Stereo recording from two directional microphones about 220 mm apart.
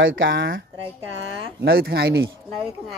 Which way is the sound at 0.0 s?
60° right (ahead or behind).